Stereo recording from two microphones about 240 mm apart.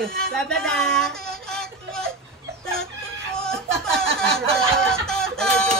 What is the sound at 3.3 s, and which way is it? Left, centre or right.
Snicker, centre.